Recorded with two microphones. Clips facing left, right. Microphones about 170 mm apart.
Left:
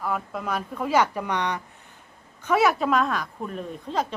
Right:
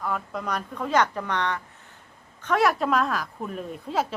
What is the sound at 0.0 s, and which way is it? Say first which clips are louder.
A woman's voice: left 1 dB; 5° left (ahead or behind).